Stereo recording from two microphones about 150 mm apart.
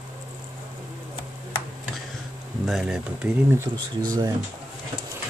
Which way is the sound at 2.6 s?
Centre (ahead or behind).